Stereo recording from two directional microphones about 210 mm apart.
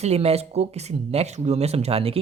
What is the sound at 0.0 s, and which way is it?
Speech, 30° right (ahead or behind).